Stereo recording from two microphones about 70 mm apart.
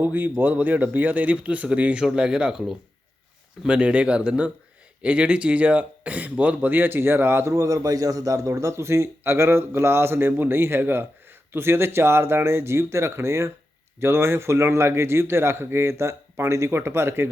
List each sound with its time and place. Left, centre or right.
0.0 s speech: right; by 2.7 s centre
3.6 s speech: centre; by 7.5 s right
7.5 s a man's voice: right